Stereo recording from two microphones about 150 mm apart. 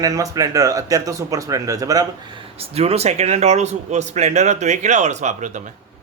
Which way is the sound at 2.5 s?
45° right (ahead or behind).